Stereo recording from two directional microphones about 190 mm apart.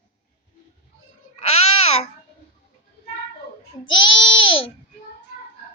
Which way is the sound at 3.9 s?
25° left (ahead or behind).